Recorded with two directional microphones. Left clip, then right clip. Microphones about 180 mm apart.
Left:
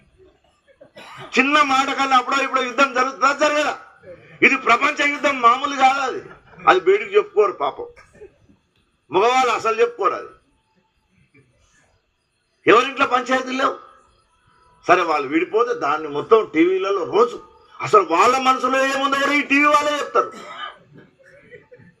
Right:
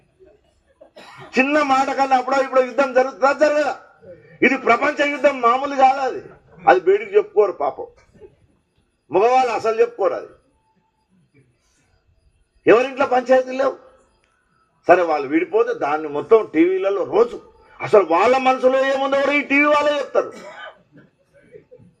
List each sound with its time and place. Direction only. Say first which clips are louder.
1.3 s a man's voice: left 1 dB; 40° right (ahead or behind)
3.4 s a man's voice: right 4 dB; 25° right (ahead or behind)
4.4 s a man's voice: left 1 dB; 40° right (ahead or behind)
7.0 s a man's voice: even; 25° right (ahead or behind)
7.3 s a man's voice: right 1 dB; 40° right (ahead or behind)
9.0 s a man's voice: right 1 dB; 40° right (ahead or behind)
12.6 s a man's voice: even; 40° right (ahead or behind)
14.8 s a man's voice: right 2 dB; 30° right (ahead or behind)